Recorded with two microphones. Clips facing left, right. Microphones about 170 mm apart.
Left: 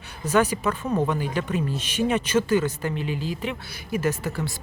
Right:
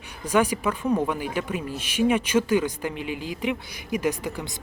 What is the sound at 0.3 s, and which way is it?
Speech, 10° right (ahead or behind).